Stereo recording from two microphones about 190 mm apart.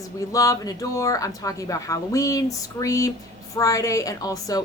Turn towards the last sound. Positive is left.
turn(degrees=20)  # may be behind; listen again after turning